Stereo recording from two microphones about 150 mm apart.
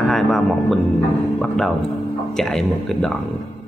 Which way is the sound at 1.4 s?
Centre (ahead or behind).